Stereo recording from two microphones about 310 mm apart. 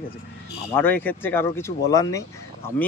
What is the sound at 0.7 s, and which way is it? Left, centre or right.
Speech, centre.